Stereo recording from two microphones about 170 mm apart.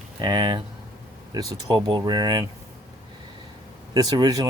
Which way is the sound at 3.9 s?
20° right (ahead or behind).